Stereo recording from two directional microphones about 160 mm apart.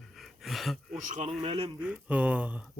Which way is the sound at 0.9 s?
50° right (ahead or behind).